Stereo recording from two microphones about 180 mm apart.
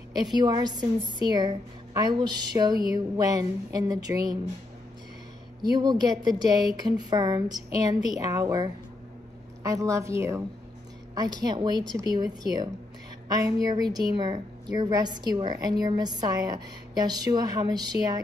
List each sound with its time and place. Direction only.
0.4 s a woman's voice: 20° right (ahead or behind)
5.6 s a woman's voice: 25° right (ahead or behind)